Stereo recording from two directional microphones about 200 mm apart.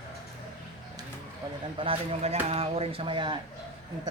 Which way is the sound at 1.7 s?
30° right (ahead or behind).